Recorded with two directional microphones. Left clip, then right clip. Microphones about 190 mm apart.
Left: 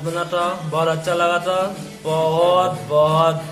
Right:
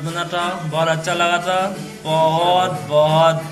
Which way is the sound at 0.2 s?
20° left (ahead or behind).